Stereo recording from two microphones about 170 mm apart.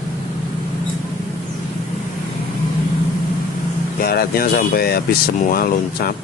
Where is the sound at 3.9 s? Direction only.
60° left (ahead or behind).